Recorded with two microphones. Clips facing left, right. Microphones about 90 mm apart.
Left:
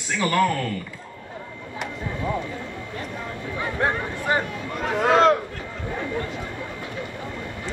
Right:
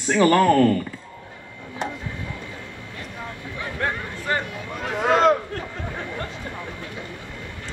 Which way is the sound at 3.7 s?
20° left (ahead or behind).